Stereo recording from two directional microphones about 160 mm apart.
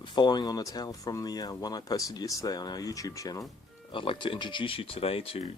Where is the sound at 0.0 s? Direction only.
30° left (ahead or behind).